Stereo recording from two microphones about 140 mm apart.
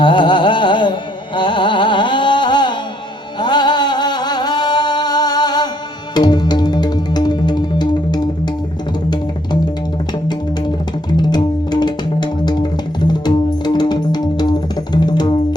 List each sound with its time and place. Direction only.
0.0 s carnatic music: 35° left (ahead or behind)
3.4 s music: 30° left (ahead or behind)
11.2 s music: 30° left (ahead or behind)